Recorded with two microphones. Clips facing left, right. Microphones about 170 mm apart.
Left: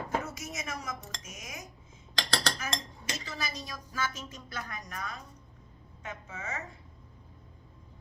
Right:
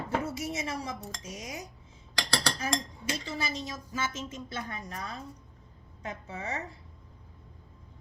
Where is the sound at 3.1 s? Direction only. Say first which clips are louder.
Right 4 dB; 25° right (ahead or behind).